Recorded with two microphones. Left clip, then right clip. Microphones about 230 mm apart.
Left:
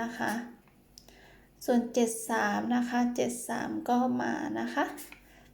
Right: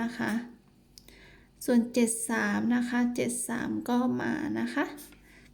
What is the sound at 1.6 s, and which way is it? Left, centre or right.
A woman's voice, right.